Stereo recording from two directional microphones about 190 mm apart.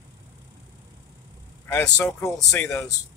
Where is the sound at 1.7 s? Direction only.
15° left (ahead or behind).